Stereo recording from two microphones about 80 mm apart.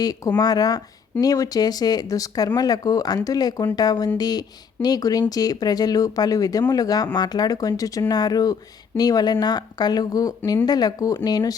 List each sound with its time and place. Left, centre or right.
0.3 s speech: left